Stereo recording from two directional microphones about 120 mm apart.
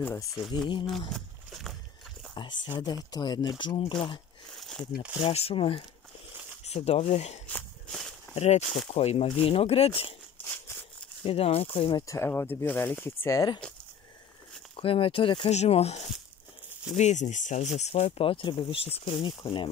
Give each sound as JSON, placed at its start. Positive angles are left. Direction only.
{"t": 0.3, "sound": "speech", "side_deg": 0}
{"t": 0.8, "sound": "a sound", "side_deg": 0}
{"t": 2.3, "sound": "speech", "side_deg": 40}
{"t": 4.6, "sound": "a sound", "side_deg": 0}
{"t": 5.2, "sound": "speech", "side_deg": 55}
{"t": 6.6, "sound": "speech", "side_deg": 60}
{"t": 8.4, "sound": "speech", "side_deg": 65}
{"t": 10.4, "sound": "a sound", "side_deg": 15}
{"t": 11.2, "sound": "speech", "side_deg": 55}
{"t": 12.1, "sound": "speech", "side_deg": 20}
{"t": 14.8, "sound": "speech", "side_deg": 50}
{"t": 15.5, "sound": "speech", "side_deg": 65}
{"t": 16.9, "sound": "speech", "side_deg": 75}